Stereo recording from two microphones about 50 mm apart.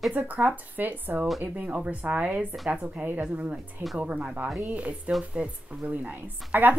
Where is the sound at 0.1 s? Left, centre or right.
Right.